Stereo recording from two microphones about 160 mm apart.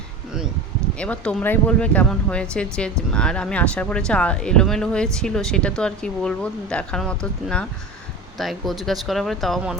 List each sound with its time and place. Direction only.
0.9 s speech: 5° left (ahead or behind)